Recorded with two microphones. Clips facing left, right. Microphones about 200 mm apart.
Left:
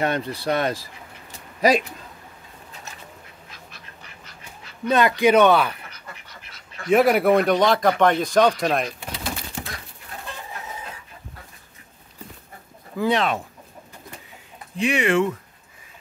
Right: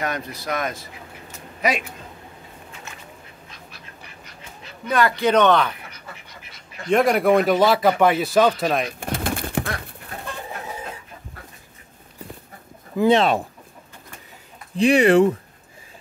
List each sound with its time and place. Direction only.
0.0 s speech: 30° left (ahead or behind)
3.4 s duck: centre (ahead or behind)
4.8 s a man's voice: 20° left (ahead or behind)
6.9 s a man's voice: 5° left (ahead or behind)
9.0 s pigeon: 50° right (ahead or behind)
12.9 s speech: 25° right (ahead or behind)
14.8 s speech: 35° right (ahead or behind)